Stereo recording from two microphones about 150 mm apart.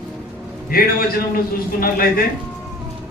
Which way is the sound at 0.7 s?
80° left.